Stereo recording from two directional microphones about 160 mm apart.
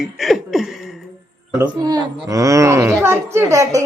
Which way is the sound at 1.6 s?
25° right (ahead or behind).